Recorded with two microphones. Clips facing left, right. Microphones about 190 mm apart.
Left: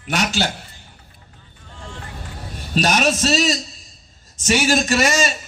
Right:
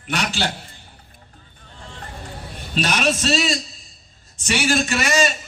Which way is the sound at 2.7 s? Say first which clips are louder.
Left 3 dB; 40° left (ahead or behind).